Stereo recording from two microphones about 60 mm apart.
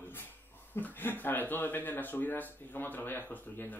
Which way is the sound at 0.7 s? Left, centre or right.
Left.